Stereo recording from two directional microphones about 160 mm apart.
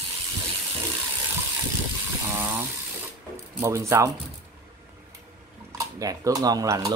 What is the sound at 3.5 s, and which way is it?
Speech, 15° right (ahead or behind).